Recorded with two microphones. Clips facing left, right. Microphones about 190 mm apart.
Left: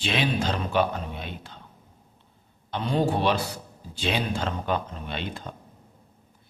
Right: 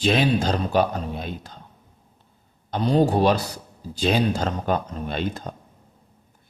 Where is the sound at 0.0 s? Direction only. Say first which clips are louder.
Right 6 dB; 40° right (ahead or behind).